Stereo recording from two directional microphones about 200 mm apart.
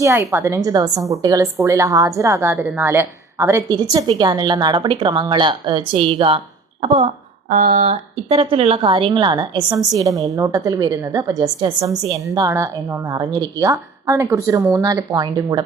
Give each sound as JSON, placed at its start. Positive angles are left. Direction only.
{"t": 0.0, "sound": "a woman's voice", "side_deg": -15}
{"t": 8.4, "sound": "a woman's voice", "side_deg": -25}